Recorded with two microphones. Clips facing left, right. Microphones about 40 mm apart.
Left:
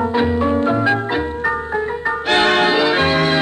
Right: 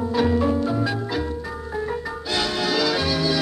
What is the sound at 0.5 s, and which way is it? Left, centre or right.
Music, left.